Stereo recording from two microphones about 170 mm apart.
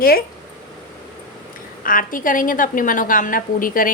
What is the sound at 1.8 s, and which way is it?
A woman's voice, 55° left (ahead or behind).